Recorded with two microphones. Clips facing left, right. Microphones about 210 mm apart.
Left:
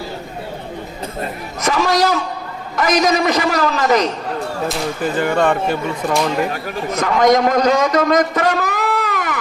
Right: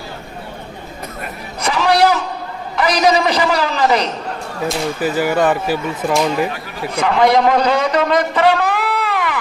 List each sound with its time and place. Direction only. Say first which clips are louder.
1.6 s a sound: right 2 dB; 45° left (ahead or behind)
2.7 s a man's voice: right 1 dB; 45° left (ahead or behind)
4.7 s speech: right 4 dB; 5° right (ahead or behind)
6.5 s a man's voice: left 3 dB; 45° left (ahead or behind)